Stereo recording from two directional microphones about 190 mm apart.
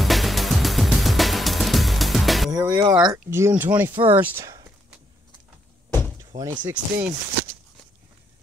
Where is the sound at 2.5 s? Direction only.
20° right (ahead or behind).